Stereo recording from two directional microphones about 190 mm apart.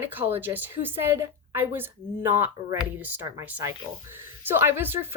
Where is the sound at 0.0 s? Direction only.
10° right (ahead or behind).